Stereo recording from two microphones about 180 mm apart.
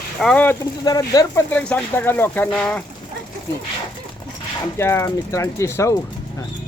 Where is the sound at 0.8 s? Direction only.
20° left (ahead or behind).